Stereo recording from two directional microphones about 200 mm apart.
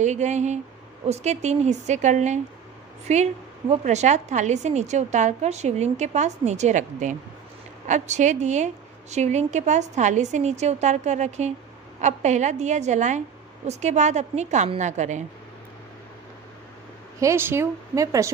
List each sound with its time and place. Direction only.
0.0 s a woman's voice: 35° right (ahead or behind)
17.2 s speech: 15° right (ahead or behind)